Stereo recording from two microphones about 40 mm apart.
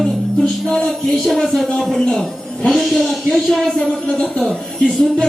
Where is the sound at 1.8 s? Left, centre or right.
Centre.